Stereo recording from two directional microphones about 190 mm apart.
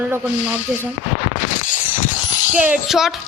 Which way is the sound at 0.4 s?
10° right (ahead or behind).